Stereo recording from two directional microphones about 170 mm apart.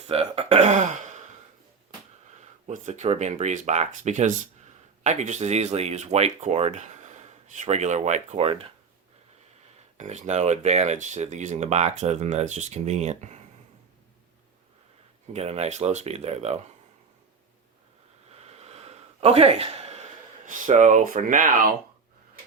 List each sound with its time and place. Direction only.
0.1 s a sound: 35° right (ahead or behind)
2.4 s speech: 45° right (ahead or behind)
10.0 s speech: 45° right (ahead or behind)
15.3 s speech: 40° right (ahead or behind)
18.3 s a sound: 40° right (ahead or behind)
20.5 s speech: 50° right (ahead or behind)